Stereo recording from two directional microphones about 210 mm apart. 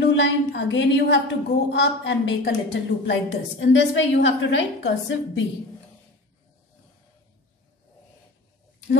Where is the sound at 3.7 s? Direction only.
60° left (ahead or behind).